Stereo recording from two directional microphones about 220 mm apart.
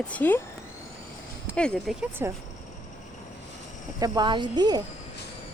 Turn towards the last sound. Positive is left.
turn(degrees=-20)  # may be behind; listen again after turning